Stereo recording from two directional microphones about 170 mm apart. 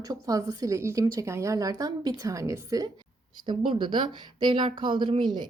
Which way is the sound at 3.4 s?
30° right (ahead or behind).